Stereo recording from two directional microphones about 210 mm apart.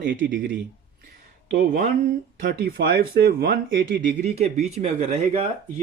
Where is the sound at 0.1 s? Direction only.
40° right (ahead or behind).